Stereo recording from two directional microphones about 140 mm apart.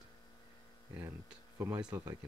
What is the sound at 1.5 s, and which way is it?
Speech, 15° right (ahead or behind).